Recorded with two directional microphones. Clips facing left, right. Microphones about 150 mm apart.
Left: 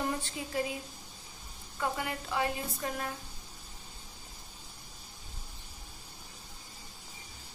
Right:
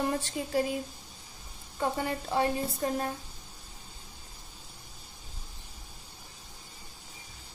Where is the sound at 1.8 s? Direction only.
35° right (ahead or behind).